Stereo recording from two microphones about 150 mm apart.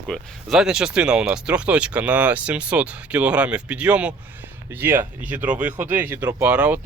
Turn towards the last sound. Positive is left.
turn(degrees=-10)  # may be behind; listen again after turning